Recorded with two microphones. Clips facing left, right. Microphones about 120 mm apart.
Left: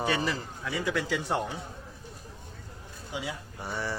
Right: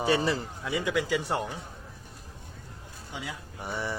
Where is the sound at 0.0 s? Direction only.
30° right (ahead or behind); by 1.4 s 10° right (ahead or behind).